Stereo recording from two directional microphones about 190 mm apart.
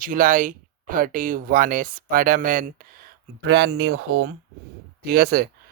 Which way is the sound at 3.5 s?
65° right (ahead or behind).